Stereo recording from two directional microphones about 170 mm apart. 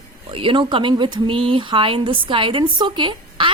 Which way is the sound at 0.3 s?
30° right (ahead or behind).